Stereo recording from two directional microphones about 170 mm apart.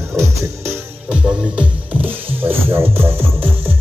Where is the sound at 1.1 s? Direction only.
5° right (ahead or behind).